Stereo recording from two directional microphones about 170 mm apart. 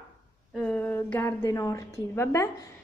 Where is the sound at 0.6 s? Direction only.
10° left (ahead or behind).